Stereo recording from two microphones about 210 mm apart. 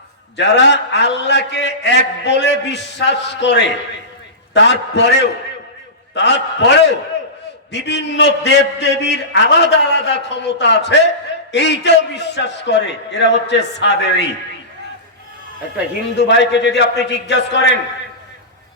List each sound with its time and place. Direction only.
0.3 s a man's voice: 55° left (ahead or behind)
16.2 s a man's voice: 55° left (ahead or behind)